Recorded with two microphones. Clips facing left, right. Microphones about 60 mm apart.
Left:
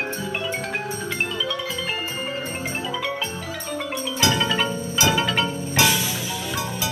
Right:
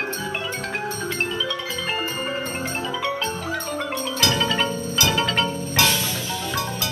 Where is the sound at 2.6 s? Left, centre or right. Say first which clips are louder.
Right 1 dB; centre.